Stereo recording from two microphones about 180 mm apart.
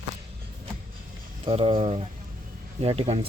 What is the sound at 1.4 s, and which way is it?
Speech, 30° right (ahead or behind).